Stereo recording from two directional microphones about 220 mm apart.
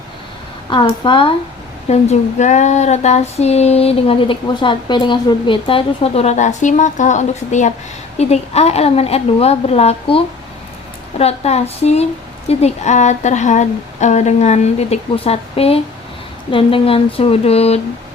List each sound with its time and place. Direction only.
0.7 s speech: 20° left (ahead or behind)